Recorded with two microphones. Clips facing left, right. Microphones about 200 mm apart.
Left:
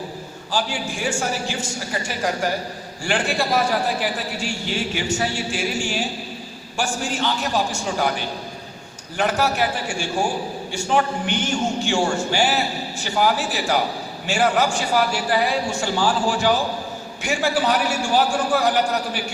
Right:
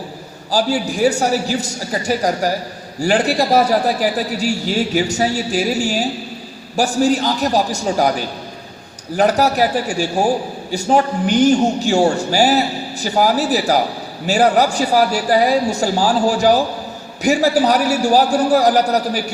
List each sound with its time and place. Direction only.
0.5 s a man's voice: 40° right (ahead or behind)